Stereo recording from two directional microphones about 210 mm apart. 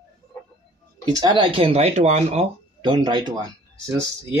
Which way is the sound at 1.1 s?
20° right (ahead or behind).